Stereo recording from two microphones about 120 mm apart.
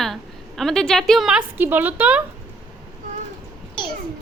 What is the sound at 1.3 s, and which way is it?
Speech, 15° right (ahead or behind).